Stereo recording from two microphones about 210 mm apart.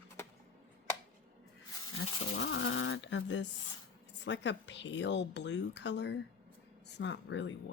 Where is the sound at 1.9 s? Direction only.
70° left (ahead or behind).